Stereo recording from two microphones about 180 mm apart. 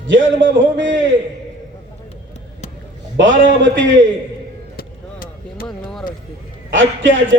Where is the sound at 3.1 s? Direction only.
90° right.